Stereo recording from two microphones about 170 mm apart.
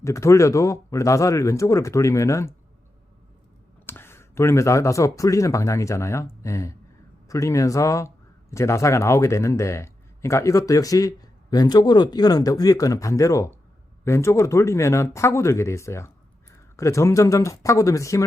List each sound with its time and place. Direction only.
0.0 s speech: 15° left (ahead or behind)
3.8 s speech: 15° left (ahead or behind)